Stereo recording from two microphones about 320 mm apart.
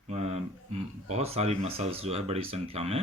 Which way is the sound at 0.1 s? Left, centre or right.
Centre.